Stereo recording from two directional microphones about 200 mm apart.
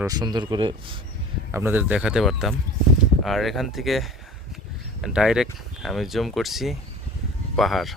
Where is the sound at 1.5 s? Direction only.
10° right (ahead or behind).